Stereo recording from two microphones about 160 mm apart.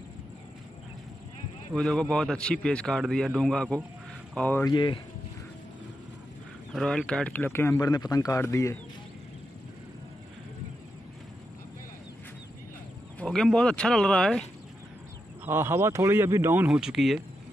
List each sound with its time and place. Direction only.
1.7 s a man's voice: 5° left (ahead or behind)
4.6 s speech: 30° left (ahead or behind)
6.7 s speech: centre (ahead or behind); by 8.7 s 20° left (ahead or behind)
13.2 s a man's voice: 5° left (ahead or behind)
15.4 s speech: 15° right (ahead or behind)
16.6 s a man's voice: 5° right (ahead or behind)